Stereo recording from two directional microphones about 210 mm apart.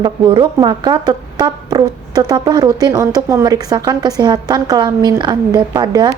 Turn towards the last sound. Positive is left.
turn(degrees=-20)  # may be behind; listen again after turning